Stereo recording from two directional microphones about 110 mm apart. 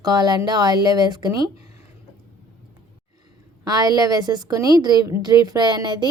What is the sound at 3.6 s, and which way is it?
A woman's voice, 35° right (ahead or behind).